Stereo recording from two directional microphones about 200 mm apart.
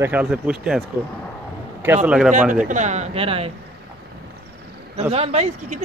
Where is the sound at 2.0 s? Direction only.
5° right (ahead or behind).